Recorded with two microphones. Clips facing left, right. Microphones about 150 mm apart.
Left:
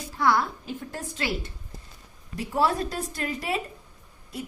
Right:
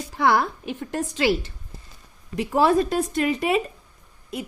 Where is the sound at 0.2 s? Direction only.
75° right (ahead or behind).